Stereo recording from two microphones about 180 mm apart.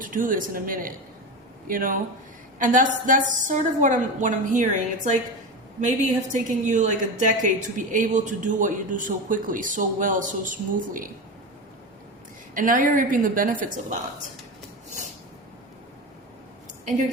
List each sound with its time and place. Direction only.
0.0 s a woman's voice: 50° right (ahead or behind)
6.3 s a woman's voice: 45° right (ahead or behind)
12.5 s a woman's voice: 50° right (ahead or behind)